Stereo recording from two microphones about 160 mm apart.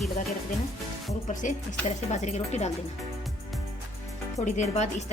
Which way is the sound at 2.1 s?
45° left (ahead or behind).